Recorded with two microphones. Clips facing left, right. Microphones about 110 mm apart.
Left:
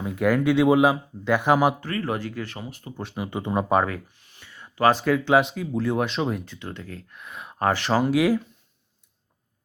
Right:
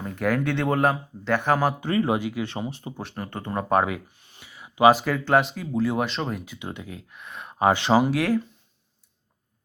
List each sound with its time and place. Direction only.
0.0 s speech: 5° left (ahead or behind)
1.8 s speech: 20° right (ahead or behind)
2.5 s speech: 25° right (ahead or behind)
3.0 s speech: 5° left (ahead or behind)
3.8 s speech: 15° right (ahead or behind)
6.4 s speech: 10° right (ahead or behind)
7.2 s speech: centre (ahead or behind)
7.6 s speech: 20° right (ahead or behind)
8.0 s speech: centre (ahead or behind)